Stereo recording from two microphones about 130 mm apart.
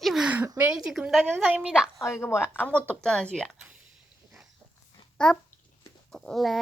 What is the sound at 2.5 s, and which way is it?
Speech, 10° left (ahead or behind).